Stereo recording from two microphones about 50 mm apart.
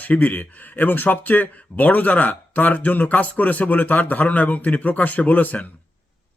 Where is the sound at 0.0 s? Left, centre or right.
Left.